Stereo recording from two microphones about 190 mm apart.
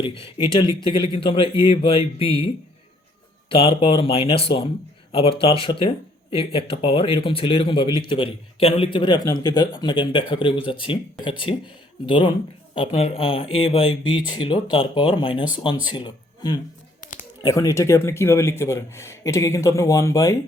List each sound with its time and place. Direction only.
0.0 s a man's voice: 30° left (ahead or behind)
3.5 s a man's voice: 30° left (ahead or behind)
17.0 s a sound: 45° left (ahead or behind)
17.4 s speech: 15° left (ahead or behind)